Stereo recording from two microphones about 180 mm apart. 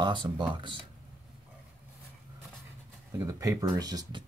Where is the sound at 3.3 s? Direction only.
20° right (ahead or behind).